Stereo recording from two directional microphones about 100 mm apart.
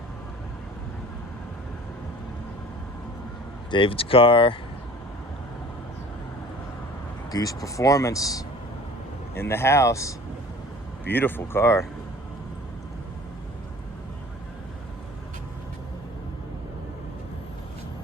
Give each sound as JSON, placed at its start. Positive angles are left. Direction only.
{"t": 3.7, "sound": "speech", "side_deg": 60}
{"t": 7.3, "sound": "speech", "side_deg": 40}
{"t": 9.3, "sound": "speech", "side_deg": 25}
{"t": 11.1, "sound": "speech", "side_deg": 20}